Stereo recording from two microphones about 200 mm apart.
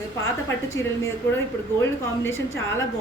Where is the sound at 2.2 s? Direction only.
15° left (ahead or behind).